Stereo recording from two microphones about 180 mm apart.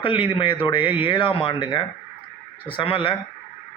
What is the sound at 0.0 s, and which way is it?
A man's voice, 30° left (ahead or behind).